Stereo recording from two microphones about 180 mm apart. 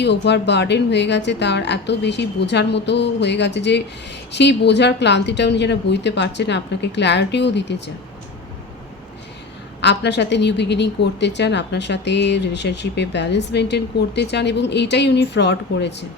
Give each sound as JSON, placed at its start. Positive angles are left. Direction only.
{"t": 0.0, "sound": "a woman's voice", "side_deg": 70}
{"t": 9.8, "sound": "a woman's voice", "side_deg": 75}